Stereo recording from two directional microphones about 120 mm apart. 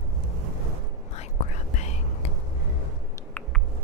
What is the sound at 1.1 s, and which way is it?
Whispering, 75° left (ahead or behind).